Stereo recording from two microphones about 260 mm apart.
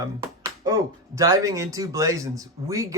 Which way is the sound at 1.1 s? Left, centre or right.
Centre.